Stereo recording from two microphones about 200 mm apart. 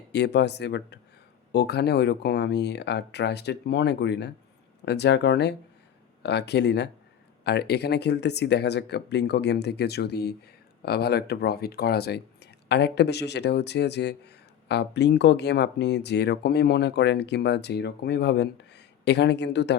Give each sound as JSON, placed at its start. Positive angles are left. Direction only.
{"t": 0.1, "sound": "speech", "side_deg": 55}